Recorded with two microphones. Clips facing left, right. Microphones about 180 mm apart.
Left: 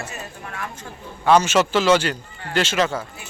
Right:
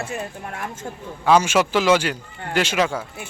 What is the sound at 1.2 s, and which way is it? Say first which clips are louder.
A man's voice: even; 10° right (ahead or behind).